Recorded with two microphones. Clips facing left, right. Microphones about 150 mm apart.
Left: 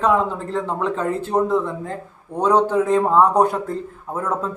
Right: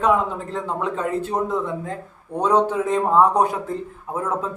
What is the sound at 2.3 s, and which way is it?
Speech, centre (ahead or behind).